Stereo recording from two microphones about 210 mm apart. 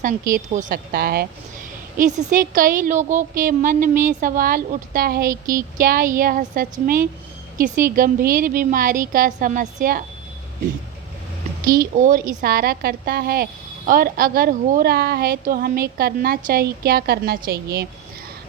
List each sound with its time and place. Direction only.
0.0 s a woman's voice: 40° right (ahead or behind)
2.0 s a woman's voice: 35° right (ahead or behind)
11.6 s a woman's voice: 45° right (ahead or behind)